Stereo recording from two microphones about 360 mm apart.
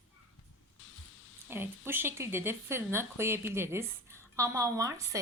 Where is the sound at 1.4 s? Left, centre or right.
Centre.